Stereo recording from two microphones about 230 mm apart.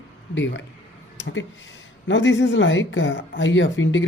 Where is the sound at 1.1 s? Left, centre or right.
Left.